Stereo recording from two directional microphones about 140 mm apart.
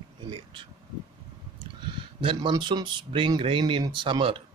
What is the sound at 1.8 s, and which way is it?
Speech, 35° right (ahead or behind).